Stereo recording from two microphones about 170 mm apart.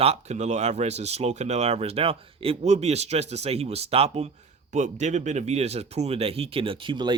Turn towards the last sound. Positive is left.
turn(degrees=-30)  # may be behind; listen again after turning